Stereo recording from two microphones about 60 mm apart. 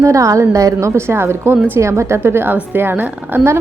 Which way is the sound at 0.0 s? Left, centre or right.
Right.